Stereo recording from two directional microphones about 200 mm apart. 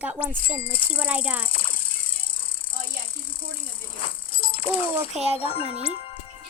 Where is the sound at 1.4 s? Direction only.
25° left (ahead or behind).